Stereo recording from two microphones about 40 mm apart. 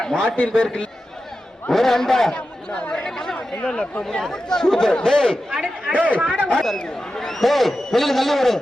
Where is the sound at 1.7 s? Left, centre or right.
Centre.